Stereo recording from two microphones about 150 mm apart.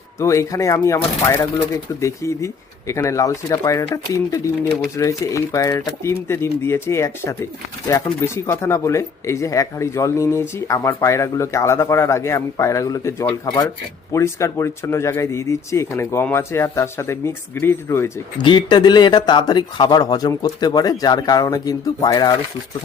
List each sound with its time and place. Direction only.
0.2 s speech: 20° left (ahead or behind)
18.4 s speech: 30° left (ahead or behind)